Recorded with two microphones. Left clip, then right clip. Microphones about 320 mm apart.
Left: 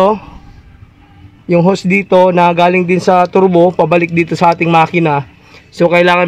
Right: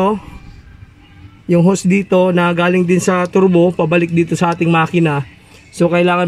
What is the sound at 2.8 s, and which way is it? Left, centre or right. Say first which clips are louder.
Speech: left 5 dB; left.